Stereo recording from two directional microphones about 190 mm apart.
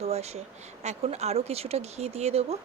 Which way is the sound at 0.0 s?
35° right (ahead or behind).